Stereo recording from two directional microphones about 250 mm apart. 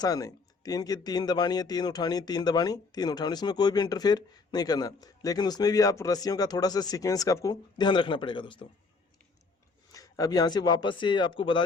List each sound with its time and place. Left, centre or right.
0.0 s speech: centre
9.9 s speech: centre